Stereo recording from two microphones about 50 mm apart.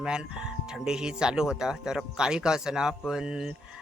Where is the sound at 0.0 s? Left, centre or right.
Centre.